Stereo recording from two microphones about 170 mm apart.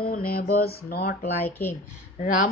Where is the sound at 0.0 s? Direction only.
60° left (ahead or behind).